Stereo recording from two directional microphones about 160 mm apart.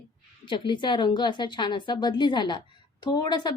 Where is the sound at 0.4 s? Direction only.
30° left (ahead or behind).